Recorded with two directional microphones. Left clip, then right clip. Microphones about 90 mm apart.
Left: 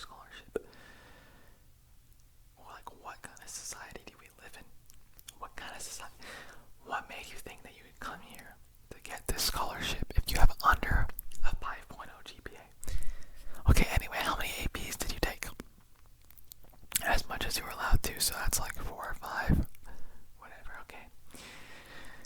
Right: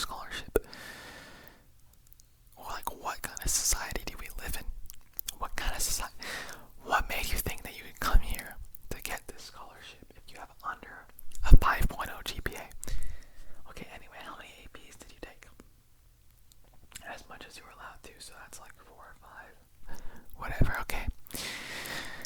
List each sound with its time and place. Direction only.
0.0 s whispering: 35° right (ahead or behind)
2.6 s whispering: 35° right (ahead or behind)
9.2 s whispering: 40° left (ahead or behind)
11.4 s whispering: 40° right (ahead or behind)
12.8 s a sound: 10° right (ahead or behind)
13.5 s whispering: 40° left (ahead or behind)
19.9 s whispering: 45° right (ahead or behind)
21.2 s a sound: 30° right (ahead or behind)